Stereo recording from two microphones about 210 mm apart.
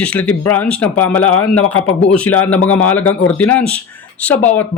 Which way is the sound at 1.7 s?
90° left.